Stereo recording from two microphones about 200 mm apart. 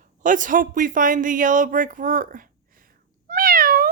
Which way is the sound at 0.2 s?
40° right (ahead or behind).